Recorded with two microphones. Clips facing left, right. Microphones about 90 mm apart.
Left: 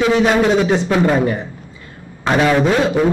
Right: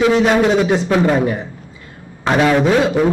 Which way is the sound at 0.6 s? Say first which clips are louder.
Even; 5° right (ahead or behind).